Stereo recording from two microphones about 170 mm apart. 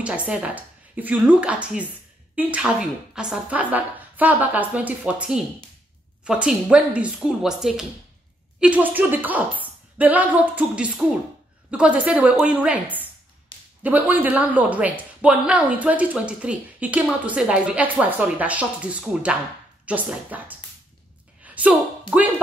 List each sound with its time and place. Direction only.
0.0 s speech: 5° right (ahead or behind)
13.5 s a sound: 30° left (ahead or behind)
13.8 s speech: 10° right (ahead or behind)